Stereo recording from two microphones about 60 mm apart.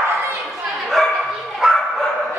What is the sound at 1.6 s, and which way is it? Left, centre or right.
Bow-wow, centre.